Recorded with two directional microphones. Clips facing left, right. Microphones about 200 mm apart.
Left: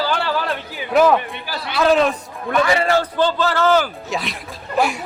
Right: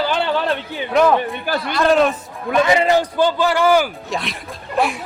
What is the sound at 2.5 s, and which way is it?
A man's voice, 20° right (ahead or behind).